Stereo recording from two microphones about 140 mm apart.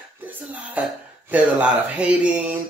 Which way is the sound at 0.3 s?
10° right (ahead or behind).